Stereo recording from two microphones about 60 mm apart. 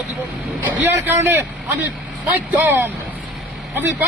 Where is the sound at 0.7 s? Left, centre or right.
Right.